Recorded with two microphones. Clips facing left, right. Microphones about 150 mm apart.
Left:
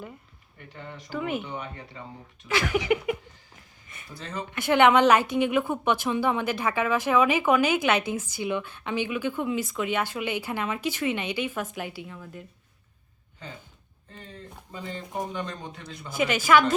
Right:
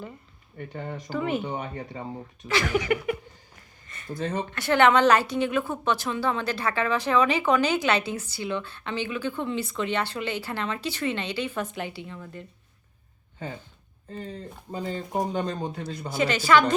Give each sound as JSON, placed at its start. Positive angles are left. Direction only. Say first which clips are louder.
{"t": 0.7, "sound": "speech", "louder": "right 5 dB", "side_deg": -50}
{"t": 1.1, "sound": "a woman's voice", "louder": "right 2 dB", "side_deg": 10}
{"t": 1.4, "sound": "speech", "louder": "right 4 dB", "side_deg": -40}
{"t": 2.5, "sound": "a woman's voice", "louder": "even", "side_deg": 15}
{"t": 4.1, "sound": "speech", "louder": "right 7 dB", "side_deg": -50}
{"t": 4.5, "sound": "a woman's voice", "louder": "left 1 dB", "side_deg": 15}
{"t": 14.1, "sound": "speech", "louder": "right 7 dB", "side_deg": -40}
{"t": 16.1, "sound": "a woman's voice", "louder": "even", "side_deg": 10}